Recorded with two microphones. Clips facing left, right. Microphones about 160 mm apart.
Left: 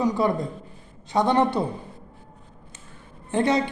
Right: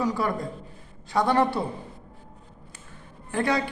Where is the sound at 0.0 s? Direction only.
20° left (ahead or behind).